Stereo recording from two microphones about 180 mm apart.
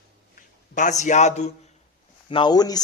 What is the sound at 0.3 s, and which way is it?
Speech, 45° left (ahead or behind).